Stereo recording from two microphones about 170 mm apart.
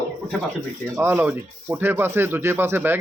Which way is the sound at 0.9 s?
15° right (ahead or behind).